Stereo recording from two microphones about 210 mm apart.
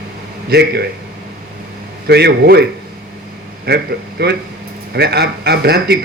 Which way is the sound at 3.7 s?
50° right (ahead or behind).